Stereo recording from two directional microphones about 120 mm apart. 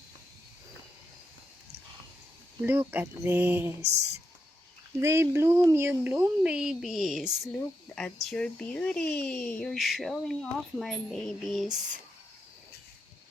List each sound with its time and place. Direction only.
2.6 s speech: 15° right (ahead or behind)
4.9 s speech: 20° right (ahead or behind); by 11.8 s centre (ahead or behind)